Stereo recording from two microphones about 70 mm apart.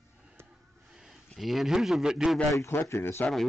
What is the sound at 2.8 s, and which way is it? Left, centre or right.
Speech, left.